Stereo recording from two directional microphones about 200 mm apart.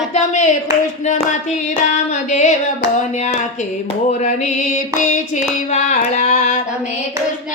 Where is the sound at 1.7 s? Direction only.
35° left (ahead or behind).